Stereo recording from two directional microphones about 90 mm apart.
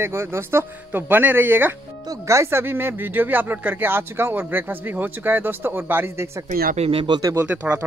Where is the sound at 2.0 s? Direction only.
35° right (ahead or behind).